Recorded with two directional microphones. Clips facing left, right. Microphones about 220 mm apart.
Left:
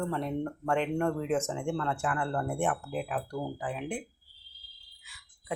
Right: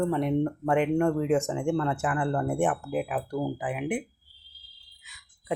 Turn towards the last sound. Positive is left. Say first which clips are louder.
# right 5 dB
turn(degrees=-20)  # may be behind; listen again after turning